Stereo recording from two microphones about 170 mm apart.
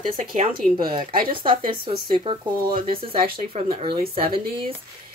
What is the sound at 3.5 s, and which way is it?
Speech, 35° right (ahead or behind).